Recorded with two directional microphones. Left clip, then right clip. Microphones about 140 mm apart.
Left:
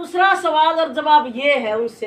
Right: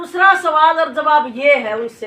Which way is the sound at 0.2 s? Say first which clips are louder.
Right 4 dB; 25° left (ahead or behind).